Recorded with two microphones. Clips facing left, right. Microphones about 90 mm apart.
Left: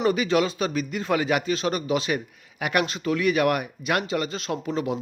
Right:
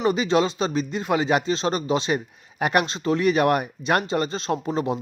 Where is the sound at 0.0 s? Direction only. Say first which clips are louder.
Right 1 dB; 25° right (ahead or behind).